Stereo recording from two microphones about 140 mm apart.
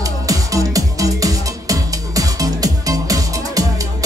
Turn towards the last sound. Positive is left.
turn(degrees=-25)  # may be behind; listen again after turning